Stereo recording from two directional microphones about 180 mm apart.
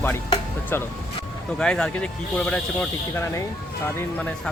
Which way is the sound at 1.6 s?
5° left (ahead or behind).